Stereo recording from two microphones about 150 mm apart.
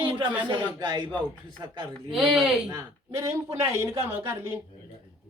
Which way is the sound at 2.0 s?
5° right (ahead or behind).